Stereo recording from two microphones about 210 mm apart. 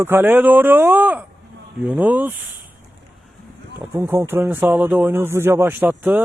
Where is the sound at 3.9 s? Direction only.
10° right (ahead or behind).